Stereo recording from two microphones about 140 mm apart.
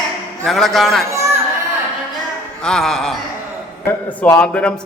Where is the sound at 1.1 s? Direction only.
20° right (ahead or behind).